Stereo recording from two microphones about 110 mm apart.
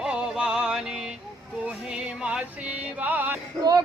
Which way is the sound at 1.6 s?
10° right (ahead or behind).